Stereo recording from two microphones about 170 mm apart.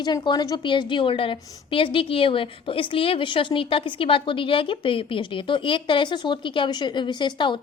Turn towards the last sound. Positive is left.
turn(degrees=25)  # may be behind; listen again after turning